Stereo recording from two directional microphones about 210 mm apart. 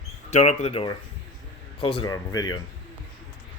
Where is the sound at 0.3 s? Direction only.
35° left (ahead or behind); by 2.6 s 20° left (ahead or behind).